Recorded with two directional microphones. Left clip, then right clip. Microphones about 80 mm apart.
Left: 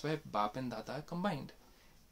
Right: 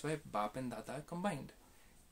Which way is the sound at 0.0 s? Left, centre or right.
Left.